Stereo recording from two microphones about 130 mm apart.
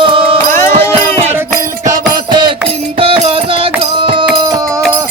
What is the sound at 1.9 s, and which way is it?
Music, 35° right (ahead or behind).